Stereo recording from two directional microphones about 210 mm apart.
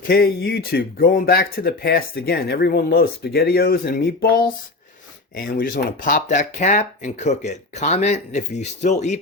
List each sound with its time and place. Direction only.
0.1 s speech: 50° left (ahead or behind)